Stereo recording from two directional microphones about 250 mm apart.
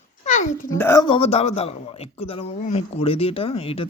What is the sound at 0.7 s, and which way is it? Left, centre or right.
A man's voice, centre.